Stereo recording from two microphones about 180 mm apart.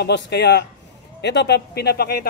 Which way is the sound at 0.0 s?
70° left (ahead or behind).